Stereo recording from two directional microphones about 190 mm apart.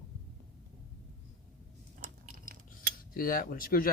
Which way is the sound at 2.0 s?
50° right (ahead or behind).